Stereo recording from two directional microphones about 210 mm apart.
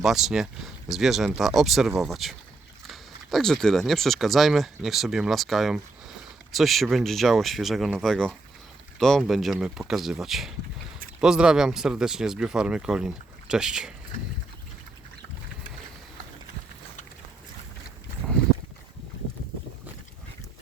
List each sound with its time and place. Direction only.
0.0 s speech: centre (ahead or behind)